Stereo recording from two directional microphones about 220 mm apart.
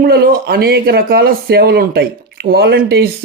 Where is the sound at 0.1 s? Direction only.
45° right (ahead or behind).